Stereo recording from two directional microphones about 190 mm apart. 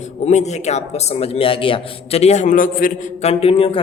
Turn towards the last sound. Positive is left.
turn(degrees=30)  # may be behind; listen again after turning